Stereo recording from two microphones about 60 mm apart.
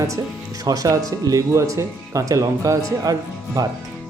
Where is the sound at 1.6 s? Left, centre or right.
Right.